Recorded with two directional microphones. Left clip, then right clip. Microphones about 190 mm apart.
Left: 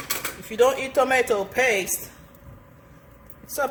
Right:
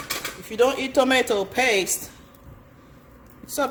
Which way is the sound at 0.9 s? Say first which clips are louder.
Right 1 dB; 40° right (ahead or behind).